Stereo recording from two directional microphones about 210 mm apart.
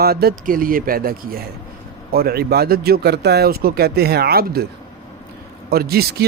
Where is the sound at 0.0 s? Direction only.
45° right (ahead or behind).